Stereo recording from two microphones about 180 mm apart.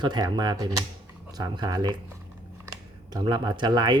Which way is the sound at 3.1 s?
25° right (ahead or behind).